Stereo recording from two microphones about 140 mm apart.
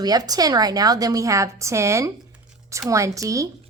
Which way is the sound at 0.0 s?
25° right (ahead or behind).